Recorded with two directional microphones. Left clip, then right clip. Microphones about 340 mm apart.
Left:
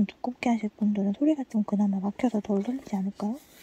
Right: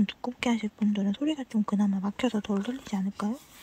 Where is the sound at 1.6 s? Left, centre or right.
Right.